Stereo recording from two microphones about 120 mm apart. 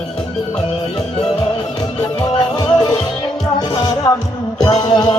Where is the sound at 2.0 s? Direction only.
35° left (ahead or behind).